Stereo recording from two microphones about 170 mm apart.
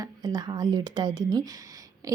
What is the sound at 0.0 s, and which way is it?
A woman's voice, 25° right (ahead or behind).